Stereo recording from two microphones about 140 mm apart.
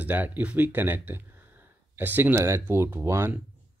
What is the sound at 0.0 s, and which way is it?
Speech, 10° right (ahead or behind).